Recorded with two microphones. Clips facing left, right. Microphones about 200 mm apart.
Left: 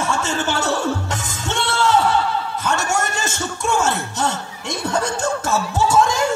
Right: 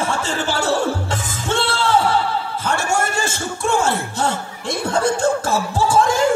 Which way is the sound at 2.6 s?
30° right (ahead or behind).